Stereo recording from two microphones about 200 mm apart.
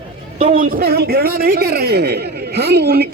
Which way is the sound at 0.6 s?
50° right (ahead or behind).